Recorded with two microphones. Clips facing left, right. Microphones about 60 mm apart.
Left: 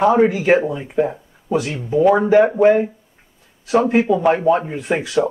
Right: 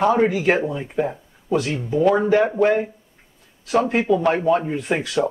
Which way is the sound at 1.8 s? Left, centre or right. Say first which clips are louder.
Left 5 dB; centre.